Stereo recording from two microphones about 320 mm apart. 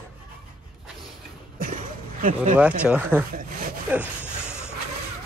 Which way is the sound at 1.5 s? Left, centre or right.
Right.